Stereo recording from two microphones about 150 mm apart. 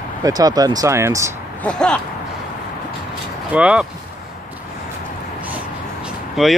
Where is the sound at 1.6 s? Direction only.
5° left (ahead or behind).